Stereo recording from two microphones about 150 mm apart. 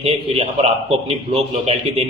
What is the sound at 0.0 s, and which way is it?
A man's voice, 45° right (ahead or behind).